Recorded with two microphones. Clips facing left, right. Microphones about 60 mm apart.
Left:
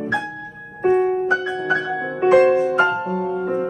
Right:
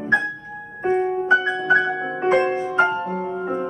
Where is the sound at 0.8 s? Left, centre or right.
Right.